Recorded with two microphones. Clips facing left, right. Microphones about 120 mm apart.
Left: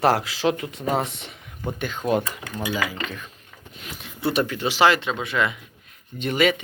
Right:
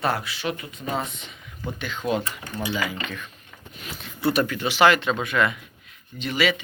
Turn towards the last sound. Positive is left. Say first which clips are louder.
# left 3 dB
turn(degrees=45)  # may be behind; listen again after turning